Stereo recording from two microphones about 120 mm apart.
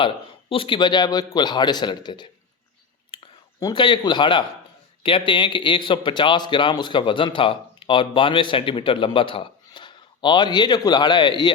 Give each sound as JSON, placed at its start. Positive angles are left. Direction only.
{"t": 0.5, "sound": "a man's voice", "side_deg": 45}
{"t": 3.1, "sound": "whispering", "side_deg": 45}
{"t": 3.6, "sound": "a man's voice", "side_deg": 40}